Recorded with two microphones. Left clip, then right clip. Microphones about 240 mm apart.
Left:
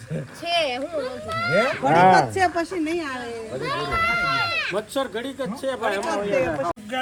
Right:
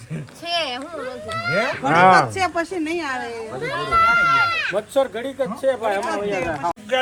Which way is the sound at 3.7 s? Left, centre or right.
Right.